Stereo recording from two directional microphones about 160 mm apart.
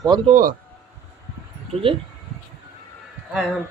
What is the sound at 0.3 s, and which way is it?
Speech, 55° right (ahead or behind).